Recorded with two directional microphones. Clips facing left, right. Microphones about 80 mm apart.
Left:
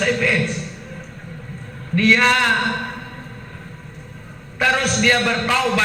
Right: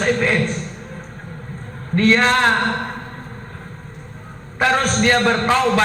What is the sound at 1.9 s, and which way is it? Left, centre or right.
Speech, right.